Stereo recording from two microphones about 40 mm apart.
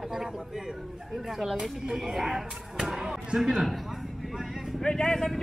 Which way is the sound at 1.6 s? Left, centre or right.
Centre.